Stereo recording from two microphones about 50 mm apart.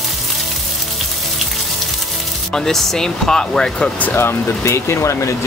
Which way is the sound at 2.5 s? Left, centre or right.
Centre.